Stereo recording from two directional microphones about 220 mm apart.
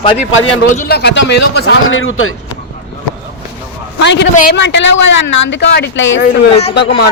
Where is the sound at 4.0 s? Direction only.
55° left (ahead or behind).